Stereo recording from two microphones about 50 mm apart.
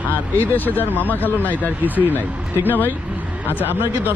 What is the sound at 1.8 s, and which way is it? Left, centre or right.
Speech, right.